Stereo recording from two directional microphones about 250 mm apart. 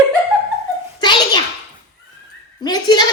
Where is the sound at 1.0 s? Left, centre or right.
Centre.